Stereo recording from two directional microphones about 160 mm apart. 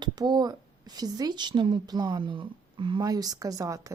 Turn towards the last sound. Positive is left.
turn(degrees=-20)  # may be behind; listen again after turning